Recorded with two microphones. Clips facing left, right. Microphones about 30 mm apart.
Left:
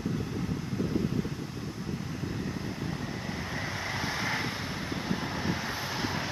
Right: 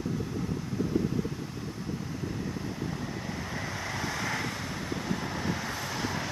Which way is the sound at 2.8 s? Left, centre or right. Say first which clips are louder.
Even; centre.